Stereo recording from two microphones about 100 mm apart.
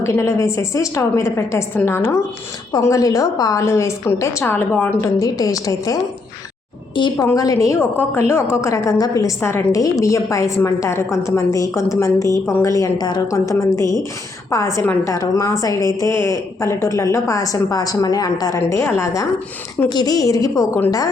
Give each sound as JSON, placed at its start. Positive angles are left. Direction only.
{"t": 0.0, "sound": "a woman's voice", "side_deg": 30}
{"t": 7.3, "sound": "a woman's voice", "side_deg": 35}
{"t": 19.9, "sound": "a woman's voice", "side_deg": 40}